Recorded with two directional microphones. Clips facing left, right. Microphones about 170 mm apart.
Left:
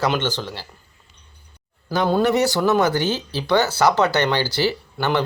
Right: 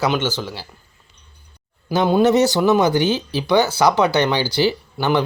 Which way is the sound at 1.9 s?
20° right (ahead or behind).